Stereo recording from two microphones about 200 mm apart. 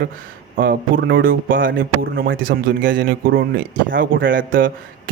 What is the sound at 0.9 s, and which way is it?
Speech, 70° right (ahead or behind).